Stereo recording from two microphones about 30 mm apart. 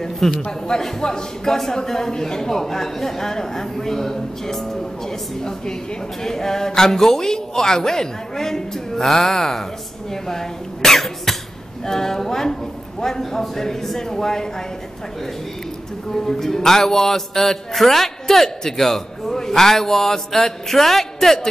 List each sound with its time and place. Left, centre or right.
0.2 s a man's voice: centre
0.7 s a man's voice: left
6.2 s a man's voice: centre
16.1 s a man's voice: centre